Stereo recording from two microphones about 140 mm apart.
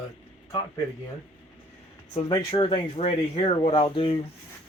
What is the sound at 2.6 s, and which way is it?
Speech, 40° left (ahead or behind).